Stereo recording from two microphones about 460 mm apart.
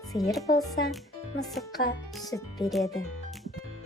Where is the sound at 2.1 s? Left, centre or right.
Centre.